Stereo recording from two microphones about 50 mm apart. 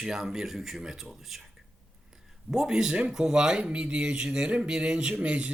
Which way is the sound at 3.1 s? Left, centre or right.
Centre.